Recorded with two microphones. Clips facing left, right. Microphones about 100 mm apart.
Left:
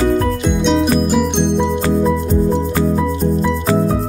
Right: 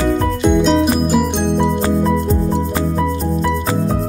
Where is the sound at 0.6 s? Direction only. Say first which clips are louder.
Left 3 dB; 5° right (ahead or behind).